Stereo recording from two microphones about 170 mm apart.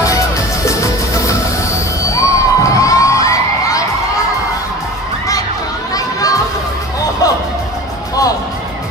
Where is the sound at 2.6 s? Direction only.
20° left (ahead or behind).